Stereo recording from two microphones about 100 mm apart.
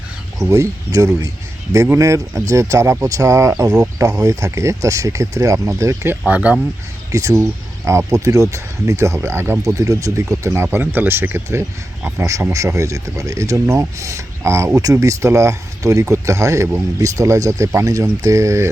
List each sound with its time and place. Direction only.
0.4 s speech: 30° right (ahead or behind)
6.2 s speech: 15° right (ahead or behind)
7.1 s speech: 35° right (ahead or behind)